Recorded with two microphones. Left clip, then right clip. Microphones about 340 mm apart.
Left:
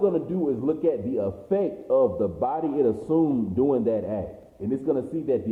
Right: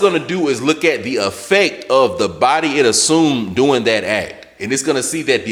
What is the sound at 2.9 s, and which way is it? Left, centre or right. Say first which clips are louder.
A man's voice: right 10 dB; right.